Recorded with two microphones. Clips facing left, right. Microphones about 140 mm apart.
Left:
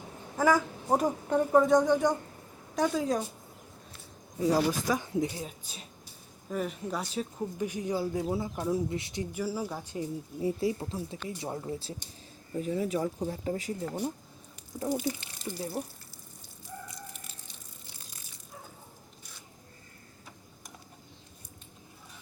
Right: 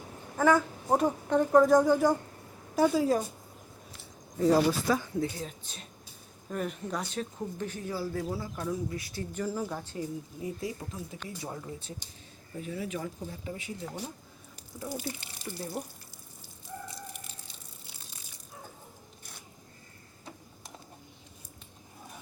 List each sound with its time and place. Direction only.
0.3 s speech: 5° left (ahead or behind)
4.4 s a woman's voice: 15° left (ahead or behind)
9.3 s a woman's voice: 10° left (ahead or behind)
10.4 s speech: 25° left (ahead or behind)
12.6 s speech: 40° left (ahead or behind)
15.4 s a woman's voice: 10° left (ahead or behind)